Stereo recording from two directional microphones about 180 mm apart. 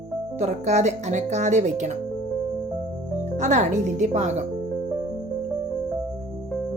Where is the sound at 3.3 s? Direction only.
40° right (ahead or behind).